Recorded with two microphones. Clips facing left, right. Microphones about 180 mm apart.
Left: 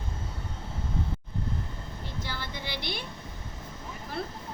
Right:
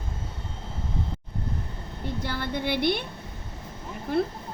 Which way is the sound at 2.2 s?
55° right (ahead or behind).